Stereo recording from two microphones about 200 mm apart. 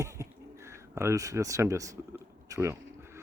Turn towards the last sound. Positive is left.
turn(degrees=-15)  # may be behind; listen again after turning